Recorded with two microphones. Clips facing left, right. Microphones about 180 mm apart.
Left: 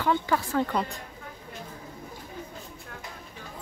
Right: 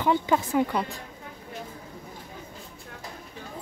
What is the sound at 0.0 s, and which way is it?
Speech, 20° right (ahead or behind).